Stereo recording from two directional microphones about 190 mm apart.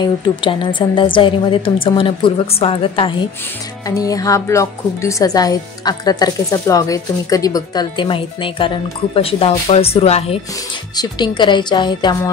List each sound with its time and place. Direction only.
0.0 s a woman's voice: 25° left (ahead or behind)
10.5 s a woman's voice: 20° left (ahead or behind)